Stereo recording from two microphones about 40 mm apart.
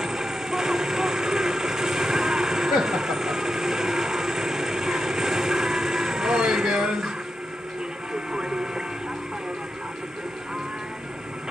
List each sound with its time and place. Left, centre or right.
0.0 s vehicle: centre
8.3 s music: centre